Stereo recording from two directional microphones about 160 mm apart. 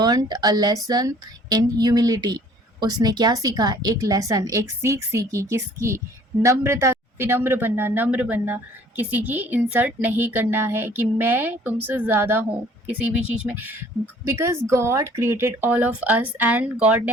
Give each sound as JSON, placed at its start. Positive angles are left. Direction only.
{"t": 0.0, "sound": "a woman's voice", "side_deg": -25}